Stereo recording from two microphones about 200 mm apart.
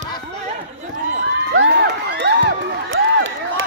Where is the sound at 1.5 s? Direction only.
60° right (ahead or behind).